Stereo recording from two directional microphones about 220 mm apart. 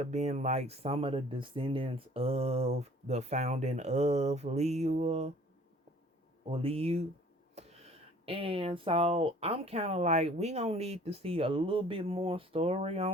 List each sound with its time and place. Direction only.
0.0 s speech: 30° right (ahead or behind)
6.5 s speech: 25° right (ahead or behind)
7.6 s a sound: 30° right (ahead or behind)
8.2 s speech: 25° right (ahead or behind)